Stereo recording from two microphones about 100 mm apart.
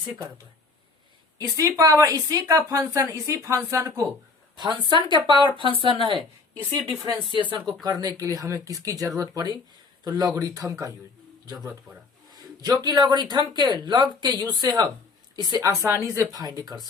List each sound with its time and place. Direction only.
1.4 s a woman's voice: 35° right (ahead or behind)
4.5 s a woman's voice: 50° right (ahead or behind)
6.7 s a woman's voice: 35° right (ahead or behind)
7.3 s speech: 55° right (ahead or behind)
7.9 s a woman's voice: 35° right (ahead or behind)
15.6 s speech: 30° right (ahead or behind)
16.6 s a woman's voice: 45° right (ahead or behind)